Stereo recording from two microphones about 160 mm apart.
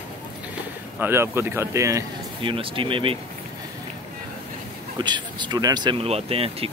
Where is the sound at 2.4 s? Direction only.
35° right (ahead or behind).